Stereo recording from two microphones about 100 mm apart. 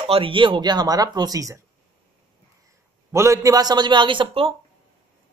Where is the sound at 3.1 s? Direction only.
30° right (ahead or behind); by 4.5 s 60° right (ahead or behind).